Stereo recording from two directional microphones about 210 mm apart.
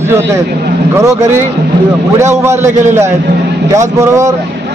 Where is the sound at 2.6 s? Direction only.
35° right (ahead or behind).